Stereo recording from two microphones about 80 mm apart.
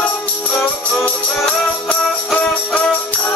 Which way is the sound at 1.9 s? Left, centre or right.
Centre.